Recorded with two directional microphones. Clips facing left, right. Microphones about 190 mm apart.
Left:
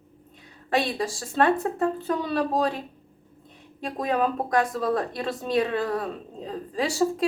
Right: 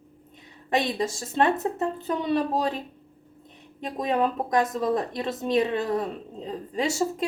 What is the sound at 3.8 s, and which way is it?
Speech, 20° right (ahead or behind).